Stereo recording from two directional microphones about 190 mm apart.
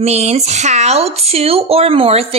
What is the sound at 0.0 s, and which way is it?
Speech, 35° right (ahead or behind).